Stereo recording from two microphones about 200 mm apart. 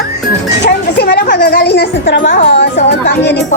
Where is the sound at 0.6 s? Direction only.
55° left (ahead or behind).